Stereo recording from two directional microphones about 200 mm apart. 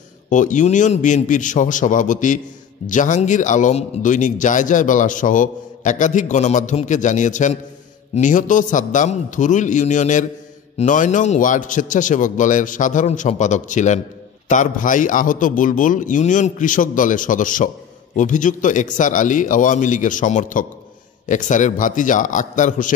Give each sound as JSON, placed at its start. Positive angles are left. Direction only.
{"t": 0.3, "sound": "a man's voice", "side_deg": 40}